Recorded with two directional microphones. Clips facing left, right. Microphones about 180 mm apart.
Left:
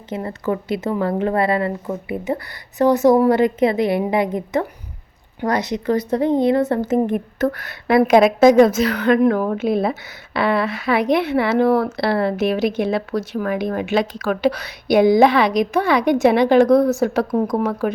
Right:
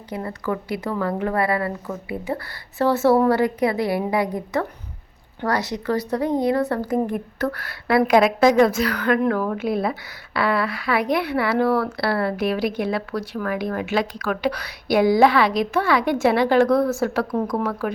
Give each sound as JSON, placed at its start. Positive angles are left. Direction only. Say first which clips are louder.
{"t": 0.1, "sound": "a woman's voice", "louder": "left 3 dB", "side_deg": 25}